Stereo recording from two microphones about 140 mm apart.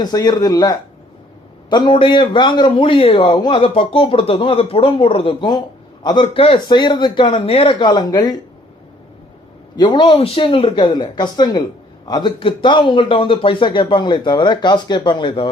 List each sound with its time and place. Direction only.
0.0 s a man's voice: 30° left (ahead or behind)
9.7 s a man's voice: 30° left (ahead or behind)
10.2 s a man's voice: 40° left (ahead or behind)